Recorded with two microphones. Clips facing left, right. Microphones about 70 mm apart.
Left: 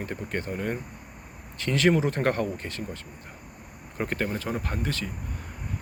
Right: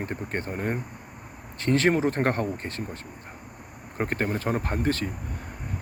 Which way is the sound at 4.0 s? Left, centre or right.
Right.